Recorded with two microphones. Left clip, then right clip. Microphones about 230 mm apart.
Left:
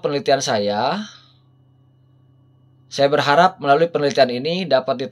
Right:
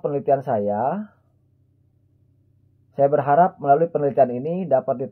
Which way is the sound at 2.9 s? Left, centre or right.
Left.